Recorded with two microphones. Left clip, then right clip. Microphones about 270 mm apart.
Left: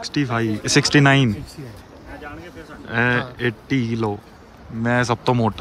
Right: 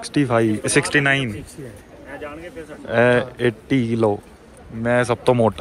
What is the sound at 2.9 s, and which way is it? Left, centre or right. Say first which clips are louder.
Speech: right 4 dB; centre.